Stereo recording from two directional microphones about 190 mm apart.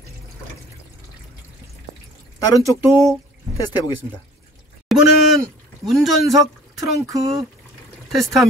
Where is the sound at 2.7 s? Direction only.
15° right (ahead or behind).